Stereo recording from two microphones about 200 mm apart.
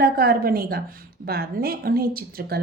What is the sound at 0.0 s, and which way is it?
A woman's voice, 50° right (ahead or behind).